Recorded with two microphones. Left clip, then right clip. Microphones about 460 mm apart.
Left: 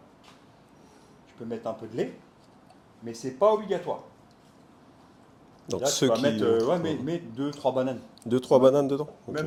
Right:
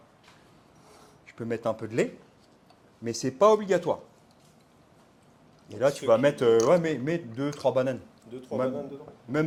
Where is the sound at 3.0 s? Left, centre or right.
Right.